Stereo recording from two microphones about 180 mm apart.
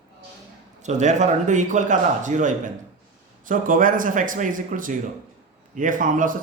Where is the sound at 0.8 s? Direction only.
40° right (ahead or behind).